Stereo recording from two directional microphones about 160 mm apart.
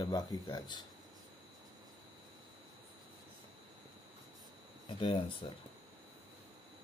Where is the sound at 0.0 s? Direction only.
25° left (ahead or behind).